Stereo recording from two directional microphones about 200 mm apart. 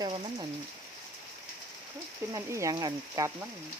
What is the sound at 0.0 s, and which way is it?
Speech, 20° right (ahead or behind).